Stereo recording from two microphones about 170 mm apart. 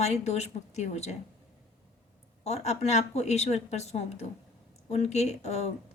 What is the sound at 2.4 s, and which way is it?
A woman's voice, 40° left (ahead or behind).